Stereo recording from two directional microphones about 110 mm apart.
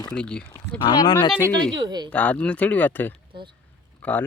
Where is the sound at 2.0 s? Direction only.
15° left (ahead or behind).